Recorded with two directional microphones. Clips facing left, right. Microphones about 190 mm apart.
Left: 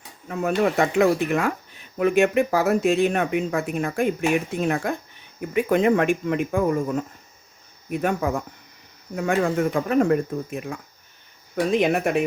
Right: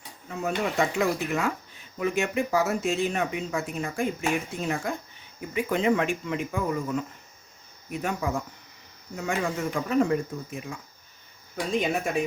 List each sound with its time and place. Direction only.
0.3 s speech: 60° left (ahead or behind)